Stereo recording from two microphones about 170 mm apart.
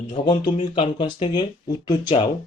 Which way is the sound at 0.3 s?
30° left (ahead or behind).